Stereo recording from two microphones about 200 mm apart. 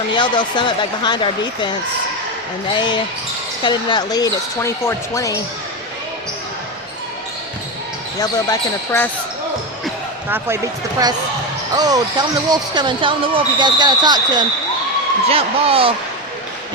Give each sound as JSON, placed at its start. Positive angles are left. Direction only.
{"t": 0.1, "sound": "speech", "side_deg": 25}
{"t": 3.6, "sound": "speech", "side_deg": 25}
{"t": 8.2, "sound": "speech", "side_deg": 15}
{"t": 10.2, "sound": "speech", "side_deg": -10}
{"t": 11.7, "sound": "speech", "side_deg": -20}